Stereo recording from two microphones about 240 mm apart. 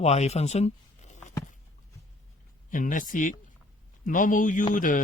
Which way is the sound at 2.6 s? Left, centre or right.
Left.